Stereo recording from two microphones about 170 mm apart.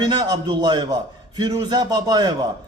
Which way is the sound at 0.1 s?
25° right (ahead or behind).